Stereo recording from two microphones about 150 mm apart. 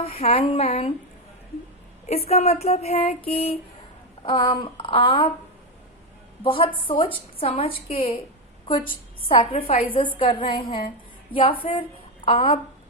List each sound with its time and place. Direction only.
0.0 s a woman's voice: 40° left (ahead or behind)
2.0 s a sound: 45° left (ahead or behind)
4.2 s a woman's voice: 35° left (ahead or behind)
6.4 s a woman's voice: 35° left (ahead or behind)
9.3 s a woman's voice: 35° left (ahead or behind)